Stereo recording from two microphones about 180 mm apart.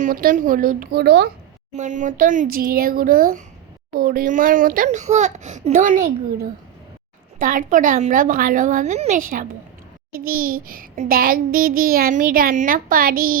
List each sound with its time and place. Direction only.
0.0 s a child's voice: 50° right (ahead or behind); by 1.3 s 70° right (ahead or behind)
1.7 s a child's voice: 40° right (ahead or behind)
7.3 s a child's voice: 50° right (ahead or behind)